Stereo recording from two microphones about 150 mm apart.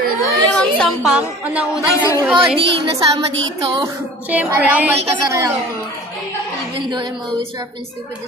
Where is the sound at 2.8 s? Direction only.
30° right (ahead or behind).